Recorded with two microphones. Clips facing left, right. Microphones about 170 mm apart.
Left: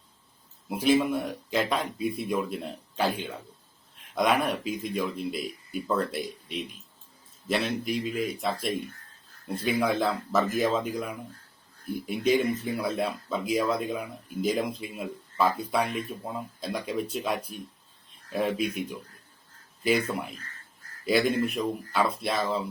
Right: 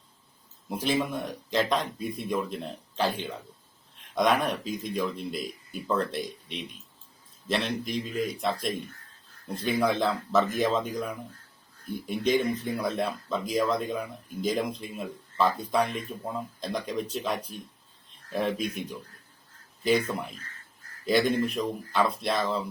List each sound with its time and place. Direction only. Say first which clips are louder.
0.7 s speech: left 4 dB; 5° left (ahead or behind)
19.8 s speech: right 1 dB; 5° left (ahead or behind)